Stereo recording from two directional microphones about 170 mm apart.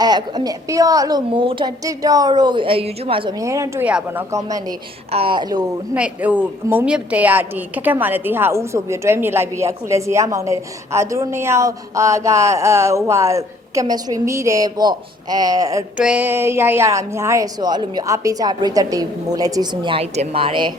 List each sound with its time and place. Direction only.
0.0 s a woman's voice: 25° right (ahead or behind)
5.9 s a woman's voice: 10° right (ahead or behind)
16.0 s a woman's voice: 10° right (ahead or behind); by 20.7 s 30° right (ahead or behind)